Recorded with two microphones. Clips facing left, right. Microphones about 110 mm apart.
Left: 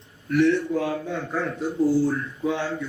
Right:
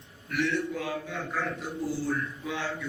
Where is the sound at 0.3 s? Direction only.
30° left (ahead or behind).